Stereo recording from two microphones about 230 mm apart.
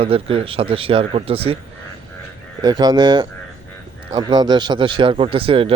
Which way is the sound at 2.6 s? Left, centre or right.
Centre.